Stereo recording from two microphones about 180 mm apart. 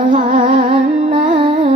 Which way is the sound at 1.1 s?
25° right (ahead or behind).